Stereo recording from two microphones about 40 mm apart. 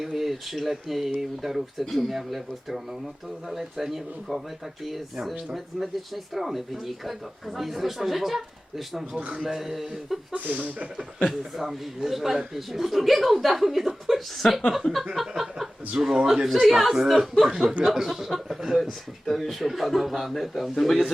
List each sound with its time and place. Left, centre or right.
0.0 s speech: centre
9.1 s speech: right
9.4 s speech: centre
10.3 s speech: right
11.3 s speech: centre
14.8 s a sound: centre
15.4 s chuckle: centre
16.0 s speech: centre